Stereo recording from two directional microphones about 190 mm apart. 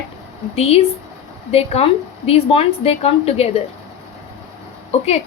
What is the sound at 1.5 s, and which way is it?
A woman's voice, 30° left (ahead or behind).